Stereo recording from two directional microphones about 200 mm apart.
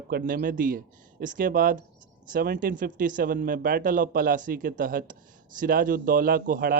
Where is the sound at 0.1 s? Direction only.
45° right (ahead or behind).